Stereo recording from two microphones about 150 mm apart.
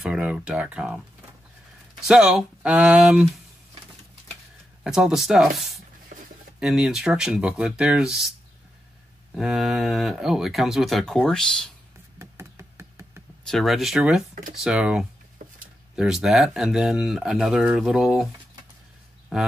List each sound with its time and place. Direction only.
0.0 s speech: 5° right (ahead or behind)
4.8 s speech: 5° right (ahead or behind)
9.3 s speech: centre (ahead or behind)
12.2 s knock: 20° right (ahead or behind)
13.5 s speech: centre (ahead or behind)
15.4 s a sound: 60° right (ahead or behind)
16.0 s speech: 5° right (ahead or behind)
19.3 s speech: centre (ahead or behind)